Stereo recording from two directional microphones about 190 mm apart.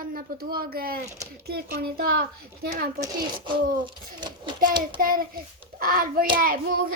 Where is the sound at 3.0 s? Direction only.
25° right (ahead or behind).